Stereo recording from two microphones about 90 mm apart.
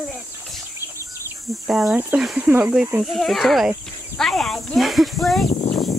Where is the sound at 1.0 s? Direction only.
30° right (ahead or behind).